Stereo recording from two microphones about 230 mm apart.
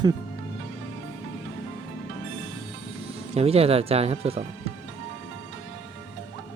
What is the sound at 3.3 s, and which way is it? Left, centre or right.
Speech, right.